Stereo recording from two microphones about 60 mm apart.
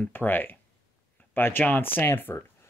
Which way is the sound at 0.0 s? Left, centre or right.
Left.